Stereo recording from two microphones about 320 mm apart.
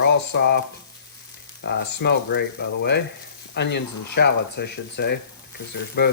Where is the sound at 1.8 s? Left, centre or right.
Left.